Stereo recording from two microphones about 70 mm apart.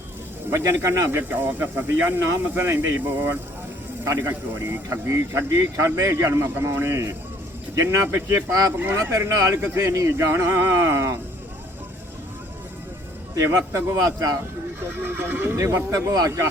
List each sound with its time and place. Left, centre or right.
0.5 s a man's voice: right
1.3 s a man's voice: right
9.0 s a man's voice: right
13.3 s a man's voice: right
15.0 s speech: right
15.5 s a man's voice: right